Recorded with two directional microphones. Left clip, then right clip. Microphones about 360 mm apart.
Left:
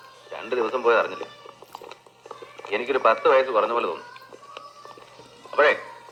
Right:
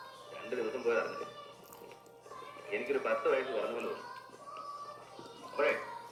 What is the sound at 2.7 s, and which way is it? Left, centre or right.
A man's voice, left.